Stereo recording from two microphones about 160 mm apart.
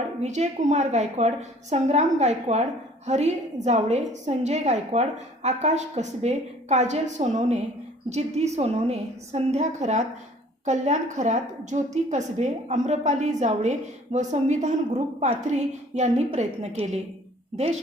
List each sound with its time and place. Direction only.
0.2 s a woman's voice: 45° right (ahead or behind)